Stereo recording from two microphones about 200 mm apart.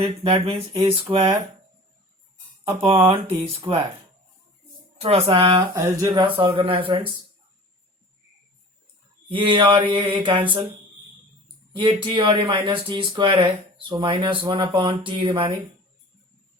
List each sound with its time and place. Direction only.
0.0 s speech: 30° right (ahead or behind)
2.6 s speech: 25° right (ahead or behind)
4.9 s speech: 30° right (ahead or behind)
9.3 s speech: 25° right (ahead or behind)
11.8 s speech: 25° right (ahead or behind)